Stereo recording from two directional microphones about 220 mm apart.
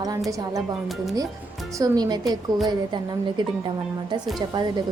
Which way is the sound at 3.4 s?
20° right (ahead or behind).